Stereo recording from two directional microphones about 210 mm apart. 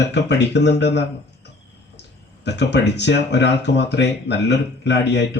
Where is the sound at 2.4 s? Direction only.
55° left (ahead or behind).